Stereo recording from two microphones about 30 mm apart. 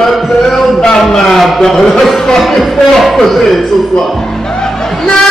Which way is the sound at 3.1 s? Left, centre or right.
Centre.